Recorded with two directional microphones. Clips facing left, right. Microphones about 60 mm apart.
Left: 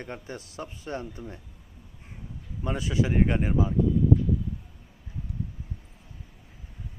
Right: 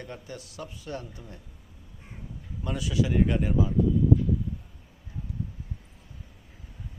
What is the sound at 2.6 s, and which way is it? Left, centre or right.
Speech, left.